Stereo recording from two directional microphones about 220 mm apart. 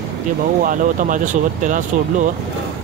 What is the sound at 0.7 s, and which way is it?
Speech, 35° right (ahead or behind).